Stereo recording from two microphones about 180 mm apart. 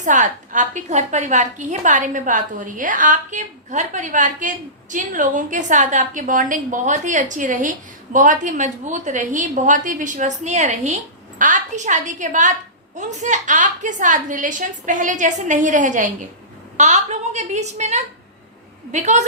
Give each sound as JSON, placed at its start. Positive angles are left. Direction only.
{"t": 0.0, "sound": "a woman's voice", "side_deg": -45}